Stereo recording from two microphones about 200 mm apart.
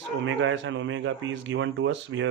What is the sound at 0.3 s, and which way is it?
A man's voice, 65° right (ahead or behind).